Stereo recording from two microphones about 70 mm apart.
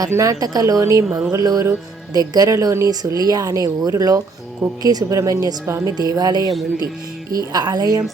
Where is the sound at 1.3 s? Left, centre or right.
Right.